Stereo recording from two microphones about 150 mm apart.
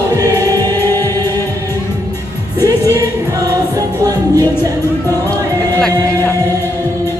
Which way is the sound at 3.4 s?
25° right (ahead or behind).